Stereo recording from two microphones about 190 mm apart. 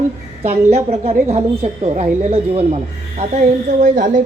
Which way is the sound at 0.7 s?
35° right (ahead or behind).